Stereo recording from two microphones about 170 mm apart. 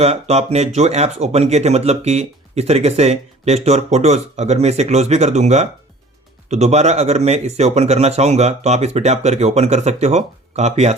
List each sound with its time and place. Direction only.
0.0 s speech: 40° right (ahead or behind)